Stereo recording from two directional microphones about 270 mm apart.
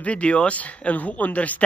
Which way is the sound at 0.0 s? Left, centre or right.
Centre.